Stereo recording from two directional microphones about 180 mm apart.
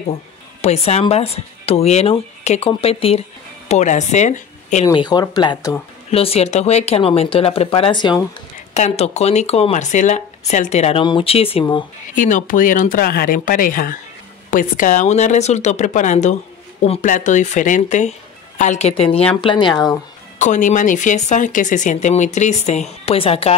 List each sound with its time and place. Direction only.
0.6 s speech: 35° left (ahead or behind)
4.8 s speech: 25° left (ahead or behind)
6.1 s speech: 35° left (ahead or behind)
8.7 s speech: 35° left (ahead or behind)
12.2 s speech: 45° left (ahead or behind); by 19.9 s 25° left (ahead or behind)
20.3 s speech: 45° left (ahead or behind)